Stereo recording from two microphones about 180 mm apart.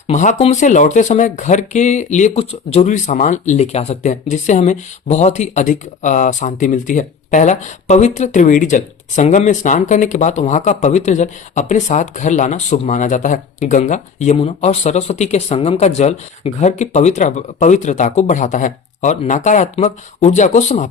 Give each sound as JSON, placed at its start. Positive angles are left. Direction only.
{"t": 0.1, "sound": "speech", "side_deg": 40}